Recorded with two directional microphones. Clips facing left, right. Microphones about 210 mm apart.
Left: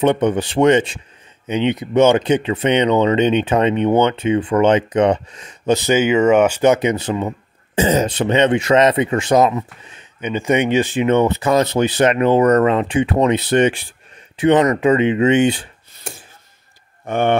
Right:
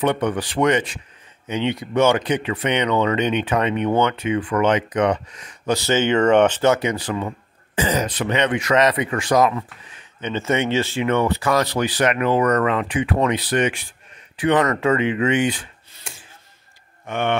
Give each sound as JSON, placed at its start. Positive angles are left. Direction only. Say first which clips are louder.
{"t": 0.0, "sound": "speech", "louder": "left 5 dB", "side_deg": 25}